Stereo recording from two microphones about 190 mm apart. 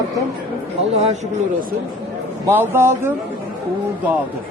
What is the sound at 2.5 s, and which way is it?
Speech, 10° right (ahead or behind).